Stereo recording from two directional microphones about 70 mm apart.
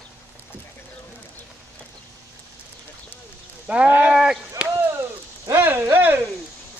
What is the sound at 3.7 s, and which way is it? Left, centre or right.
Speech, right.